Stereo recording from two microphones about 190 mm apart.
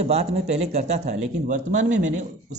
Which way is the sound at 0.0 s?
35° right (ahead or behind).